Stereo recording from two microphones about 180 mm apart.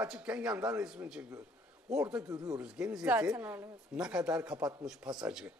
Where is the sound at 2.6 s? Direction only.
5° right (ahead or behind).